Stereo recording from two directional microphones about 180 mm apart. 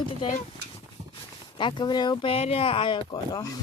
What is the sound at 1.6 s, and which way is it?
Speech, 25° left (ahead or behind).